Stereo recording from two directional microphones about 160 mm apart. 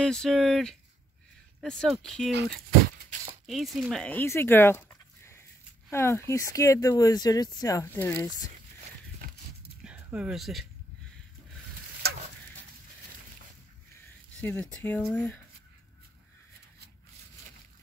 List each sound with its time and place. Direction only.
0.0 s speech: 5° left (ahead or behind)
3.4 s speech: centre (ahead or behind); by 8.5 s 15° left (ahead or behind)
9.8 s speech: 5° right (ahead or behind)
14.4 s speech: 10° left (ahead or behind)